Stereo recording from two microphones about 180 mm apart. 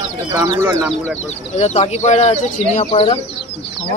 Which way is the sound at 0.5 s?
15° right (ahead or behind).